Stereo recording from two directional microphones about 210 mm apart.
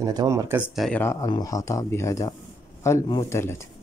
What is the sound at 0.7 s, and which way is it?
Speech, 5° left (ahead or behind).